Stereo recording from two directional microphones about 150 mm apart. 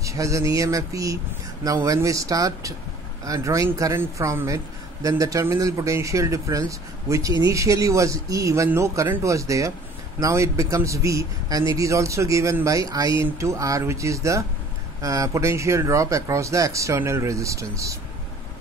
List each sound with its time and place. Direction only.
0.0 s speech: 20° right (ahead or behind)